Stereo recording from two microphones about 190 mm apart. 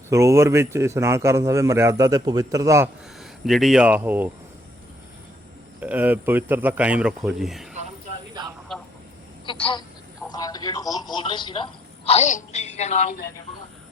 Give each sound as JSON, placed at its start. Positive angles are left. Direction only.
{"t": 0.1, "sound": "a man's voice", "side_deg": -15}
{"t": 3.2, "sound": "speech", "side_deg": 0}
{"t": 5.8, "sound": "a man's voice", "side_deg": -10}
{"t": 8.7, "sound": "vehicle", "side_deg": 0}
{"t": 9.5, "sound": "speech", "side_deg": 25}
{"t": 10.2, "sound": "television", "side_deg": 20}
{"t": 12.0, "sound": "a woman's voice", "side_deg": 35}